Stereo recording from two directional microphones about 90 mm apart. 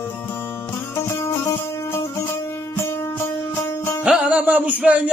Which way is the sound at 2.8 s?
30° left (ahead or behind).